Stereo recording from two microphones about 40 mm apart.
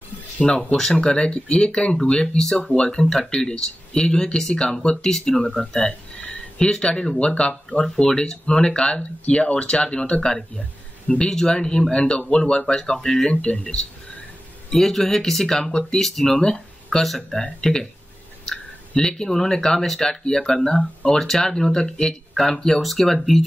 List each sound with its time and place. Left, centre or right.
0.4 s speech: left
0.7 s speech: centre
5.5 s a sound: centre
6.7 s speech: centre
11.2 s speech: centre
14.7 s speech: centre
15.6 s speech: centre
16.0 s speech: centre
17.4 s speech: centre